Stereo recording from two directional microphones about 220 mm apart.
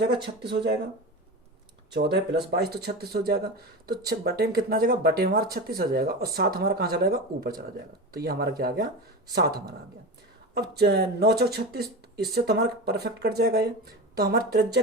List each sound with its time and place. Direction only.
0.5 s speech: 50° right (ahead or behind)
1.9 s speech: 50° right (ahead or behind)